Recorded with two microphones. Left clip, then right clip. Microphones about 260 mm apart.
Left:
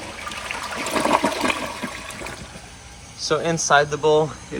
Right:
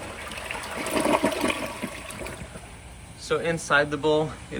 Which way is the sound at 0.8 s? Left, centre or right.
Centre.